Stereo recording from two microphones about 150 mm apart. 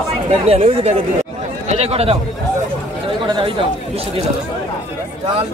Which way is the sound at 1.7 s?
45° right (ahead or behind).